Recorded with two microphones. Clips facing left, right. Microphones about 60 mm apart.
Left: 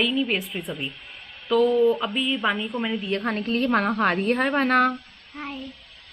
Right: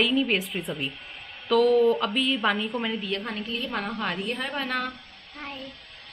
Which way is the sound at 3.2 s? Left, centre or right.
Left.